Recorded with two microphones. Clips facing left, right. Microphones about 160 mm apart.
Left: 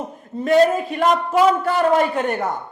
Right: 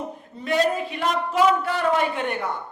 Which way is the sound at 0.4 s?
45° left (ahead or behind).